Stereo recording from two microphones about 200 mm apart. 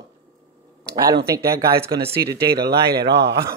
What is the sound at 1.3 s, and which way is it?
Speech, 15° right (ahead or behind).